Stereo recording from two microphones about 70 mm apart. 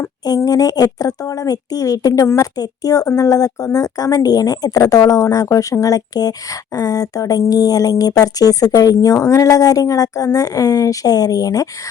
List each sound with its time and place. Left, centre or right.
0.3 s speech: left
2.2 s a woman's voice: left
2.6 s speech: left